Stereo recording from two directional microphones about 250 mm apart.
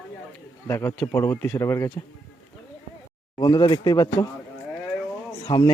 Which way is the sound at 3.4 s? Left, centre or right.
Centre.